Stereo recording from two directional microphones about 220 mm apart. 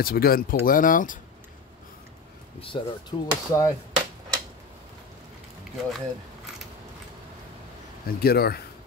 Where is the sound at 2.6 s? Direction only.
20° left (ahead or behind).